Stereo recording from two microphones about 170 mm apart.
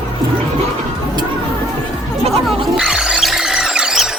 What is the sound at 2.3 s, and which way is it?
Music, centre (ahead or behind).